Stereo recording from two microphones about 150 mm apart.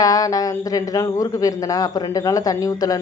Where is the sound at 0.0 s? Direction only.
25° left (ahead or behind).